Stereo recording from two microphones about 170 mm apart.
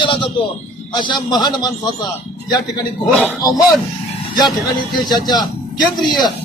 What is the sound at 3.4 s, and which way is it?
Speech, 20° left (ahead or behind).